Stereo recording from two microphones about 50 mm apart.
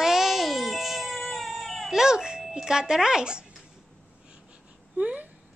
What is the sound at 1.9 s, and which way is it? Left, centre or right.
A child's voice, centre.